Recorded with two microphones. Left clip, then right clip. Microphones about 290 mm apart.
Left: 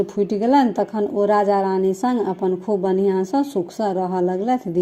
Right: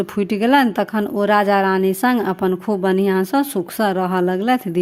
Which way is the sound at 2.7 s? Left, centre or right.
Right.